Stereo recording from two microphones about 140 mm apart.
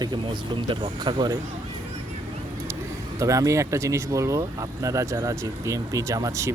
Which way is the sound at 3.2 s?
25° right (ahead or behind).